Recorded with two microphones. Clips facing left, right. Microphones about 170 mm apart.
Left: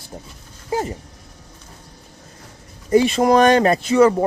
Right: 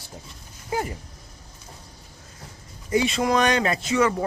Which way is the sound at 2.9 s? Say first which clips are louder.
Left 7 dB; 40° left (ahead or behind).